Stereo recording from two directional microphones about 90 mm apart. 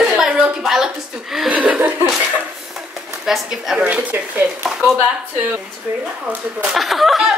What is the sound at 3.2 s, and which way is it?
Speech, 5° right (ahead or behind).